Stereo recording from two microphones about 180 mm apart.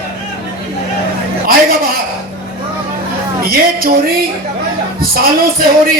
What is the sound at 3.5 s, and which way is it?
Speech, 55° right (ahead or behind).